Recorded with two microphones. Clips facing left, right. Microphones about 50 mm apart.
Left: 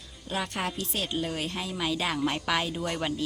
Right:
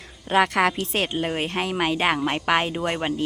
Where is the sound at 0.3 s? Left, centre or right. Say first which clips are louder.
Right 12 dB; right.